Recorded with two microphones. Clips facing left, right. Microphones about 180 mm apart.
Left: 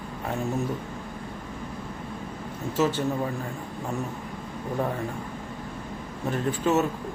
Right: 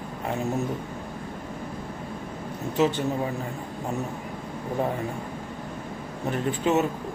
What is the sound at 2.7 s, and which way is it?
Speech, 15° right (ahead or behind).